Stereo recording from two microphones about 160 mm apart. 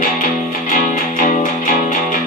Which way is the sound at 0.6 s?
55° left (ahead or behind).